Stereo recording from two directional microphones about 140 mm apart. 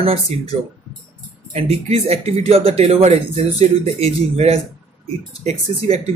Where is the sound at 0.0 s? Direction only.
45° right (ahead or behind).